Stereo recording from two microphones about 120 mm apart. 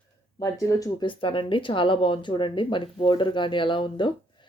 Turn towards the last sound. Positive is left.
turn(degrees=45)  # may be behind; listen again after turning